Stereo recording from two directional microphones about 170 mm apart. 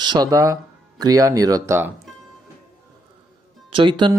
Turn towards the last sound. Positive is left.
turn(degrees=-30)  # may be behind; listen again after turning